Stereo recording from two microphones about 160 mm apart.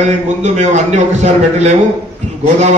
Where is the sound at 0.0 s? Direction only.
50° right (ahead or behind).